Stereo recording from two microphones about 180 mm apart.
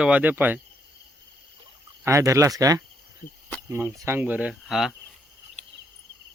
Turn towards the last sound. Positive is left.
turn(degrees=0)  # may be behind; listen again after turning